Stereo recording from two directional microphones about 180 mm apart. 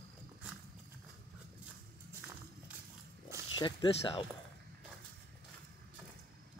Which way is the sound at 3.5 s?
25° left (ahead or behind).